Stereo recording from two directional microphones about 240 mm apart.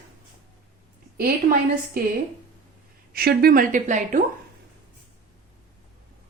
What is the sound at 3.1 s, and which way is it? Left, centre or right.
A woman's voice, right.